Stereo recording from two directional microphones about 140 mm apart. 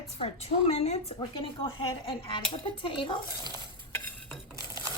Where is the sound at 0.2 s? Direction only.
45° left (ahead or behind).